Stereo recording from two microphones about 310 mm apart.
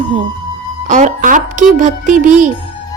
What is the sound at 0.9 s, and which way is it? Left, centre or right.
A woman's voice, right.